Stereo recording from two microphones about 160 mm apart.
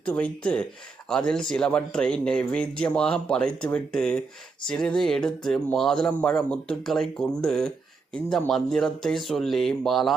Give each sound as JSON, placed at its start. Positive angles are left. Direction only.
{"t": 0.0, "sound": "a man's voice", "side_deg": 10}